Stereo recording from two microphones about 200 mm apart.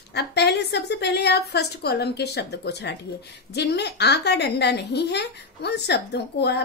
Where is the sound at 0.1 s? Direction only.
55° left (ahead or behind).